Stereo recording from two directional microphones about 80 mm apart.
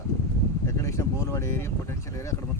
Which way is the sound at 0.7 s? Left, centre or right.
Left.